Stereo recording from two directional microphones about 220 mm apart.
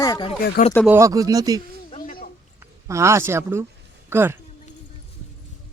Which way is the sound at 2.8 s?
15° right (ahead or behind).